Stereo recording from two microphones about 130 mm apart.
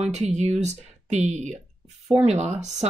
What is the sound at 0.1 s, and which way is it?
Speech, 60° right (ahead or behind).